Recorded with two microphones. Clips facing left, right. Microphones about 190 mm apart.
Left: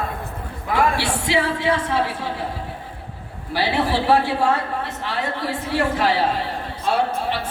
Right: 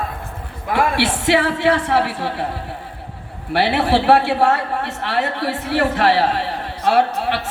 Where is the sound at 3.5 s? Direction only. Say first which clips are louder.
Right 4 dB; 70° right (ahead or behind).